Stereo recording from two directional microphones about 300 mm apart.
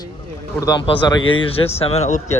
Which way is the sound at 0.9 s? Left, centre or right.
Centre.